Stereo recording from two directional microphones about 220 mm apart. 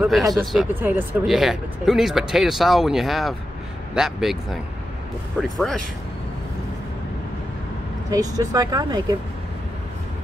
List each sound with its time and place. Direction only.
0.1 s speech: centre (ahead or behind)
5.4 s speech: centre (ahead or behind)
8.1 s speech: 15° right (ahead or behind)